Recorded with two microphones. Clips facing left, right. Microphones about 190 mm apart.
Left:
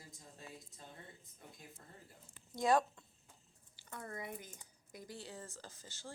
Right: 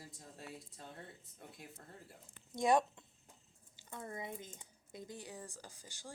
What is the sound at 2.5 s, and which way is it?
Speech, 20° right (ahead or behind).